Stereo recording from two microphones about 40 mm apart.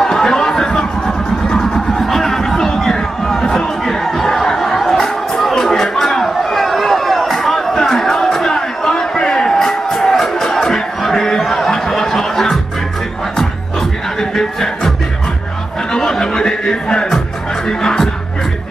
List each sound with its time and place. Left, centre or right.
0.0 s music: centre
5.3 s a sound: centre
14.3 s music: centre
15.9 s music: centre